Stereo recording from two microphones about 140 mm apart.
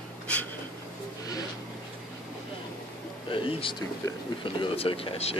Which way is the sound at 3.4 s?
40° left (ahead or behind).